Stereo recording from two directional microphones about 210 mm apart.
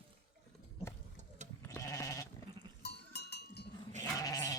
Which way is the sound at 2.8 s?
50° left (ahead or behind).